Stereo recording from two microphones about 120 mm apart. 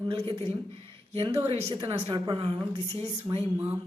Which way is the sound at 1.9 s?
40° right (ahead or behind).